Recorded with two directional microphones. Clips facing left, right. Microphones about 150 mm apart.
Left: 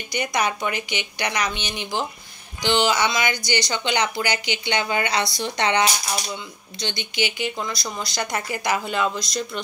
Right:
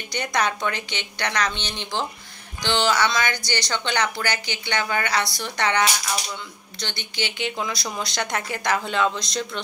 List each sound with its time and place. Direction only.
0.1 s speech: 10° left (ahead or behind)